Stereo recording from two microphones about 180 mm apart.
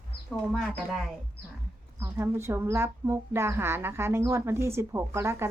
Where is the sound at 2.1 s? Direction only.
15° right (ahead or behind).